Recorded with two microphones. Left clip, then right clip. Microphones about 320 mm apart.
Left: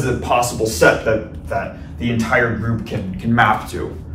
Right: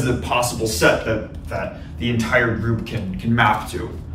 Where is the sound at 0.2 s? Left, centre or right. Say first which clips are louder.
Left 4 dB; centre.